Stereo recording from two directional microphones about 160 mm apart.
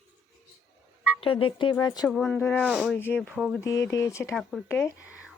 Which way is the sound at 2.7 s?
5° right (ahead or behind).